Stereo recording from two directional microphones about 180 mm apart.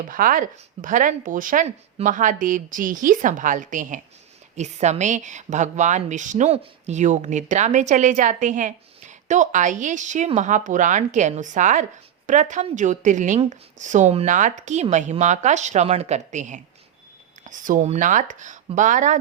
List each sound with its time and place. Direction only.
0.1 s a woman's voice: 50° right (ahead or behind)